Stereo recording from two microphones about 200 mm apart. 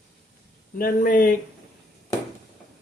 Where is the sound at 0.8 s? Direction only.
45° left (ahead or behind).